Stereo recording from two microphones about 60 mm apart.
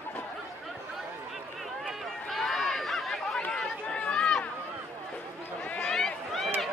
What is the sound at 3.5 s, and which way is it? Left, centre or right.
Run, centre.